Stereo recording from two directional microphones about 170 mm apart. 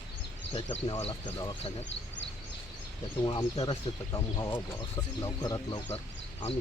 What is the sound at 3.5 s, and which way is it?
Speech, 30° left (ahead or behind).